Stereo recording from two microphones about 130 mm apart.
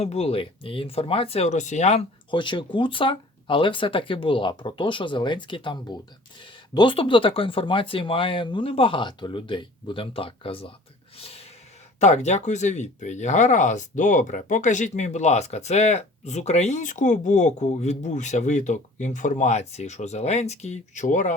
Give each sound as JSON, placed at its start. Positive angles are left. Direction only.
{"t": 0.0, "sound": "speech", "side_deg": 55}
{"t": 2.3, "sound": "speech", "side_deg": 40}
{"t": 11.2, "sound": "a sound", "side_deg": 50}
{"t": 11.9, "sound": "speech", "side_deg": 60}